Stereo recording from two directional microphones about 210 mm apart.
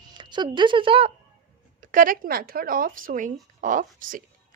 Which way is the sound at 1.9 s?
40° right (ahead or behind).